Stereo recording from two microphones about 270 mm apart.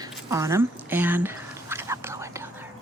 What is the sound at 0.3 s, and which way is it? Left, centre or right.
Whispering, centre.